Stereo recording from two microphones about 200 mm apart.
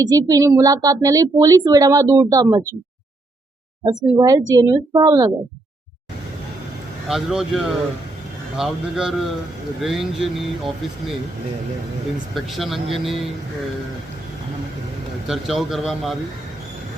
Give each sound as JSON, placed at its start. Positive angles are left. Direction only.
{"t": 0.0, "sound": "speech", "side_deg": -20}
{"t": 4.2, "sound": "a woman's voice", "side_deg": -20}
{"t": 7.1, "sound": "speech", "side_deg": 0}
{"t": 12.3, "sound": "speech", "side_deg": 0}
{"t": 15.3, "sound": "speech", "side_deg": 0}